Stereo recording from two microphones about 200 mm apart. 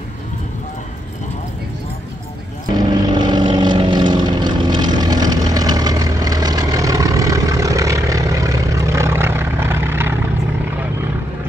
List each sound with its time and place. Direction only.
2.7 s vehicle: 20° right (ahead or behind)